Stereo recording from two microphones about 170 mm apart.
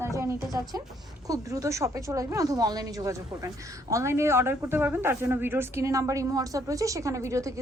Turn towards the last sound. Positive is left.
turn(degrees=-20)  # may be behind; listen again after turning